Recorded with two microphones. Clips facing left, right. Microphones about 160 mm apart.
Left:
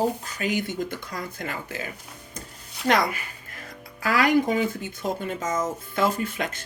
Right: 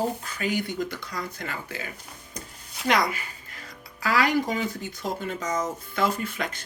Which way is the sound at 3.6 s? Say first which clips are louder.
Left 2 dB; 50° left (ahead or behind).